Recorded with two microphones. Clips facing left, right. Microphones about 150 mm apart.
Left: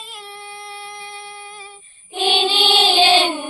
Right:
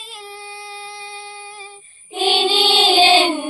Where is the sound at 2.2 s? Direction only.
10° right (ahead or behind).